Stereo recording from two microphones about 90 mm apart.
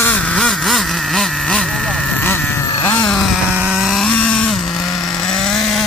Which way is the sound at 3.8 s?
Centre (ahead or behind).